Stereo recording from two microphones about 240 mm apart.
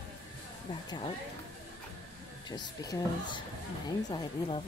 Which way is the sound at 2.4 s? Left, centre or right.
Centre.